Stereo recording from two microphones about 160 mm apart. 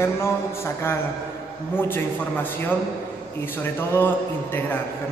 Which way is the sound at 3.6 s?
15° left (ahead or behind).